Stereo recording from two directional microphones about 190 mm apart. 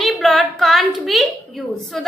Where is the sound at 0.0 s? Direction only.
Centre (ahead or behind).